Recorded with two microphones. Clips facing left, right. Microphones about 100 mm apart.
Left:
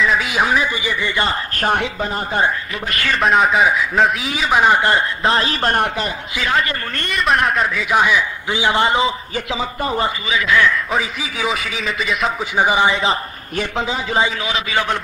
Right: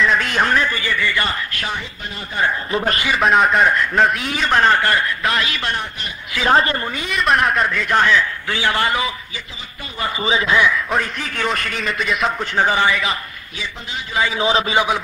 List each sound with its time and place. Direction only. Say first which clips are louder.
0.0 s a man's voice: even; 5° left (ahead or behind); by 1.3 s 20° left (ahead or behind)
1.5 s a woman's voice: left 8 dB; 45° left (ahead or behind)
3.2 s a man's voice: left 1 dB; centre (ahead or behind); by 5.8 s 40° left (ahead or behind)
6.4 s a woman's voice: right 4 dB; 35° right (ahead or behind)
6.9 s a man's voice: even; centre (ahead or behind); by 9.1 s 25° left (ahead or behind)
10.2 s a man's voice: right 4 dB; 30° right (ahead or behind)
10.9 s a man's voice: even; 5° left (ahead or behind)
12.5 s a man's voice: left 2 dB; 15° left (ahead or behind)
12.9 s a man's voice: left 3 dB; 30° left (ahead or behind)
14.4 s a woman's voice: right 5 dB; 30° right (ahead or behind)